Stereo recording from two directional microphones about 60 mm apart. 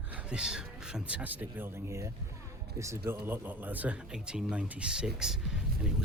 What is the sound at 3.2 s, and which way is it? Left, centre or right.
Speech, right.